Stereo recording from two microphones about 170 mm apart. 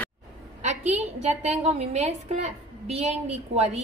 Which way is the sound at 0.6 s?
40° right (ahead or behind).